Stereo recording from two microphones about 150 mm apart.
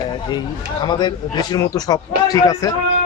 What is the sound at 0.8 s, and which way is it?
A man's voice, 30° left (ahead or behind).